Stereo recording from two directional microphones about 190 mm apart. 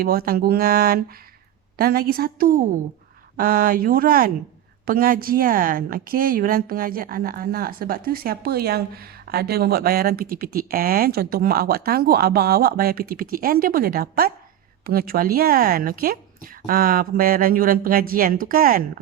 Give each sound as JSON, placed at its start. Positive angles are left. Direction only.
{"t": 0.0, "sound": "speech", "side_deg": -50}